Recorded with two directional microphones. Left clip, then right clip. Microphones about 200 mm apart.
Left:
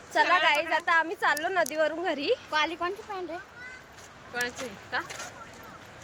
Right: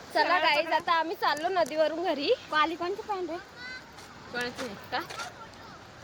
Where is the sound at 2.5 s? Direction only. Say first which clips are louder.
Right 1 dB; 55° right (ahead or behind).